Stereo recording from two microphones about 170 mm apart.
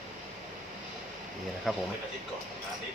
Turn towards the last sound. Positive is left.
turn(degrees=0)  # may be behind; listen again after turning